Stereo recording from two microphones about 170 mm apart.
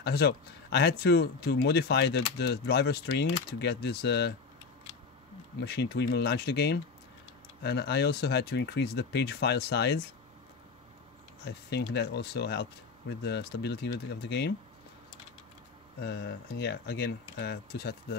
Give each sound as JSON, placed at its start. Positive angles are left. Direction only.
{"t": 0.0, "sound": "speech", "side_deg": 70}
{"t": 5.6, "sound": "speech", "side_deg": 80}
{"t": 11.4, "sound": "speech", "side_deg": 75}
{"t": 16.0, "sound": "speech", "side_deg": 75}